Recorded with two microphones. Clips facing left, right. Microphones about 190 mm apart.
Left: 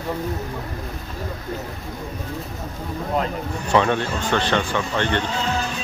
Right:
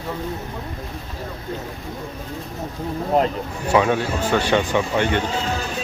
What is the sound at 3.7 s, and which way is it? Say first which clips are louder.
Speech: right 1 dB; 10° right (ahead or behind).